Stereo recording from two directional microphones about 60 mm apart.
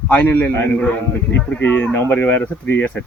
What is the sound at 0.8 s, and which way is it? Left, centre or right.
A man's voice, centre.